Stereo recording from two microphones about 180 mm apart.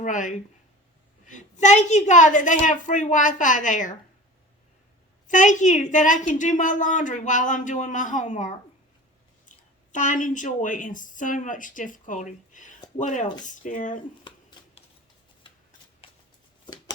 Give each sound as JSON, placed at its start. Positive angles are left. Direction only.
{"t": 0.0, "sound": "a woman's voice", "side_deg": 45}
{"t": 5.3, "sound": "a woman's voice", "side_deg": 45}
{"t": 14.3, "sound": "a sound", "side_deg": 30}